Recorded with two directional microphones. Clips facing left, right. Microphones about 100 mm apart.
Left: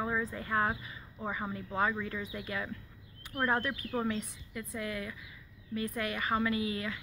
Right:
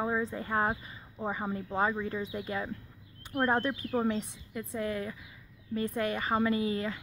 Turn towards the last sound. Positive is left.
turn(degrees=-35)  # may be behind; listen again after turning